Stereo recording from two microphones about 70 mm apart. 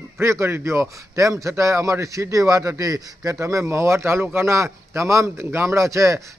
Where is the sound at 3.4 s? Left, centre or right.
Right.